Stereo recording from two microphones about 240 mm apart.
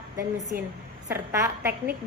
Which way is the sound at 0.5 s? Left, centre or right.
Right.